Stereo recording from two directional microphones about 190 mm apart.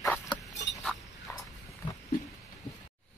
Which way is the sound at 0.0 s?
15° left (ahead or behind).